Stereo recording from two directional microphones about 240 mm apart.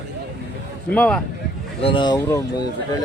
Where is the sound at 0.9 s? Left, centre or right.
Centre.